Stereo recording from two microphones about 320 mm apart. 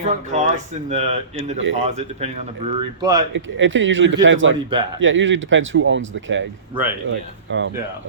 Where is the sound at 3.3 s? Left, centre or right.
Right.